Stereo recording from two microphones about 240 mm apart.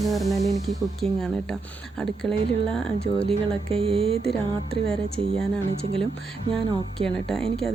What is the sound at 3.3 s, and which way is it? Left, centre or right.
Speech, right.